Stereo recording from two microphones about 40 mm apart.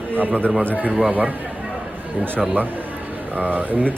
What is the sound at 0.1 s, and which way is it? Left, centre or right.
Speech, right.